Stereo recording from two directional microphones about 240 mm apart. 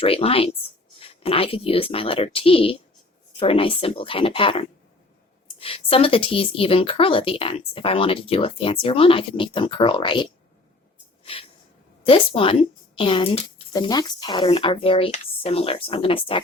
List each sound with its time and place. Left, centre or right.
0.0 s speech: left
11.2 s snort: left
12.0 s speech: left